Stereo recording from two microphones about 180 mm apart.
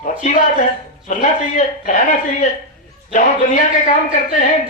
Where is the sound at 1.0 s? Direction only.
45° left (ahead or behind).